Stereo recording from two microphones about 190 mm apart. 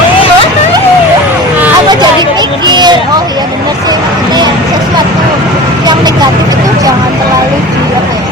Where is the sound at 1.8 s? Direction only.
20° right (ahead or behind).